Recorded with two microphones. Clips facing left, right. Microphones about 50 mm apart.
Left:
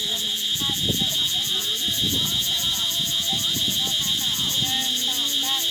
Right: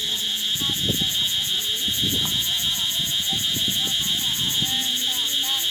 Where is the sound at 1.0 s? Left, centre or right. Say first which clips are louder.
Right 1 dB; right.